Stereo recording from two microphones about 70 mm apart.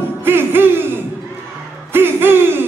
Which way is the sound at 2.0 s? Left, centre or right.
Right.